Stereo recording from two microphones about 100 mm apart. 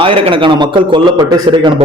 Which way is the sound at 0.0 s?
60° right (ahead or behind).